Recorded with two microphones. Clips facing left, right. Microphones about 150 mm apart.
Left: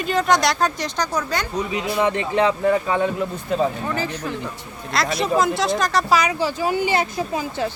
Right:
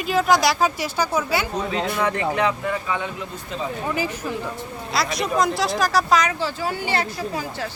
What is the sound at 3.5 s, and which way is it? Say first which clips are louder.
Speech: left 9 dB; 50° left (ahead or behind).